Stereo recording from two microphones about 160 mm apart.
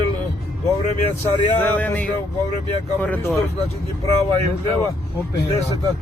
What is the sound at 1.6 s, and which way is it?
Speech, 10° left (ahead or behind).